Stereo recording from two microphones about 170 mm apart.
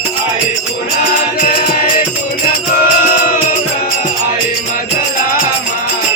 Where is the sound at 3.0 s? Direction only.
55° left (ahead or behind).